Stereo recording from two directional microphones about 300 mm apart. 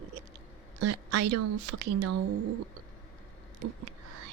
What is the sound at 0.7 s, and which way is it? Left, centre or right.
Speech, right.